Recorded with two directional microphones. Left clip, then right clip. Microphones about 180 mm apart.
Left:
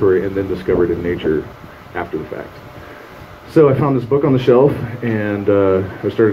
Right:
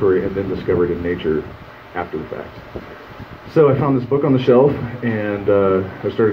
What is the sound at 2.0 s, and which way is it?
Speech, 55° left (ahead or behind).